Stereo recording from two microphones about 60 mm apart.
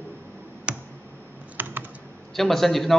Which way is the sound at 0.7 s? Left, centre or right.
Centre.